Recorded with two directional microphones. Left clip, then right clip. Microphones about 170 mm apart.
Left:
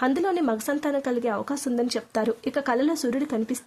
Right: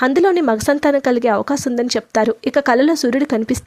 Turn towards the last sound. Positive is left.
turn(degrees=-40)  # may be behind; listen again after turning